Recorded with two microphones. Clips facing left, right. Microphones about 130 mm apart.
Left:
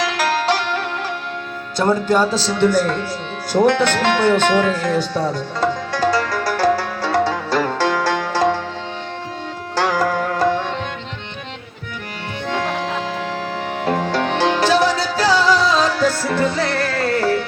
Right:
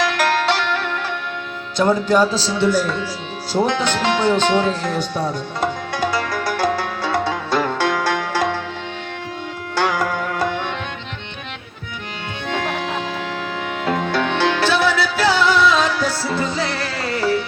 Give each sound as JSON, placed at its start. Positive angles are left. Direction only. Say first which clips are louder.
{"t": 0.1, "sound": "music", "louder": "even", "side_deg": 35}
{"t": 1.8, "sound": "speech", "louder": "right 1 dB", "side_deg": 45}
{"t": 3.5, "sound": "music", "louder": "left 4 dB", "side_deg": 55}
{"t": 9.7, "sound": "music", "louder": "left 2 dB", "side_deg": 40}
{"t": 12.5, "sound": "music", "louder": "left 1 dB", "side_deg": 40}